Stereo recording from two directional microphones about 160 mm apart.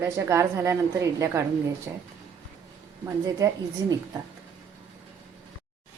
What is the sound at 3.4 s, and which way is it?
Speech, 20° right (ahead or behind).